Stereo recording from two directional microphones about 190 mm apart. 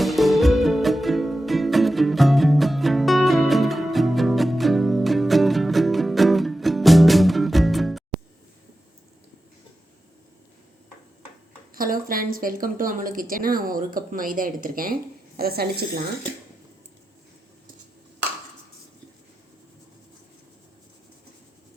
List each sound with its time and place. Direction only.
0.0 s music: centre (ahead or behind)
11.7 s speech: 50° right (ahead or behind)